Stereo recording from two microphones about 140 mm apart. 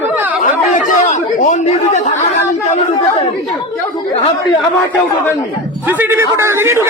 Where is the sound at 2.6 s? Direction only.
55° left (ahead or behind).